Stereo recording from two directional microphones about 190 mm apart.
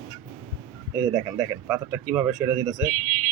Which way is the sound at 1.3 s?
15° right (ahead or behind).